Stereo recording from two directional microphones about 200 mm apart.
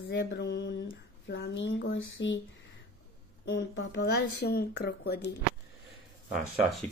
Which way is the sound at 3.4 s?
65° left (ahead or behind).